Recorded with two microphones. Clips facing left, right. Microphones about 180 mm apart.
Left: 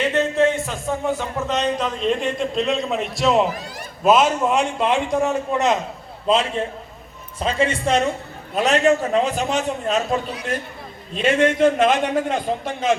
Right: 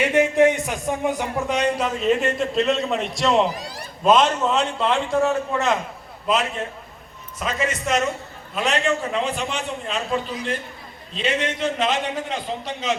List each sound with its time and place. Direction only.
0.1 s a man's voice: 15° right (ahead or behind); by 5.7 s 20° left (ahead or behind)
6.3 s a man's voice: 30° left (ahead or behind); by 13.0 s 50° left (ahead or behind)